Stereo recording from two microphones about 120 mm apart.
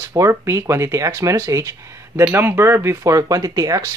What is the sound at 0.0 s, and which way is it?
Speech, 25° right (ahead or behind).